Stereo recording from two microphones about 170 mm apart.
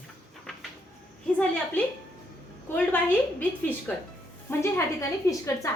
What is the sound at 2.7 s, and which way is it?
Speech, 10° left (ahead or behind).